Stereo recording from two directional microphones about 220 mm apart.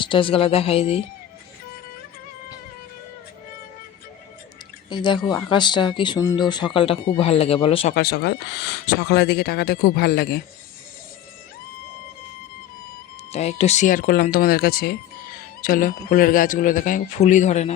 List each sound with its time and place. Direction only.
0.0 s speech: 25° left (ahead or behind)
4.9 s speech: 20° left (ahead or behind)
7.9 s speech: 45° left (ahead or behind)
13.3 s a man's voice: 30° left (ahead or behind)